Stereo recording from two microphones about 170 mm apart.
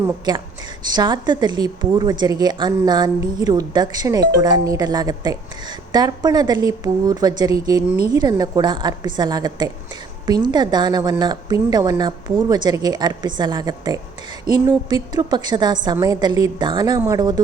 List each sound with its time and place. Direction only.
0.3 s a woman's voice: 25° right (ahead or behind)